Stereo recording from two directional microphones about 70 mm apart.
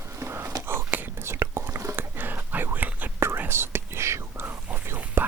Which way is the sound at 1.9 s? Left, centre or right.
Right.